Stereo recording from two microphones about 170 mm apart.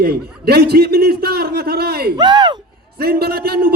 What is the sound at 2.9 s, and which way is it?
Speech, 65° right (ahead or behind).